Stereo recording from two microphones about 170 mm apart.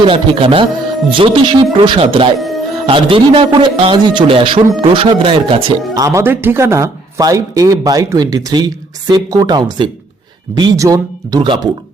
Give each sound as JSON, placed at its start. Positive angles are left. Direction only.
{"t": 0.0, "sound": "a man's voice", "side_deg": -30}